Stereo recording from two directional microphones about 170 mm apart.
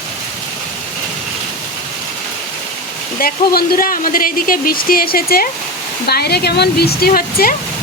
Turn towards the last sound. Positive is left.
turn(degrees=60)  # may be behind; listen again after turning